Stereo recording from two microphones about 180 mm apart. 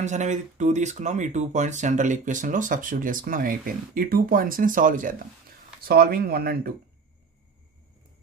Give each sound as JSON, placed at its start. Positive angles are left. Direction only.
{"t": 0.0, "sound": "speech", "side_deg": -40}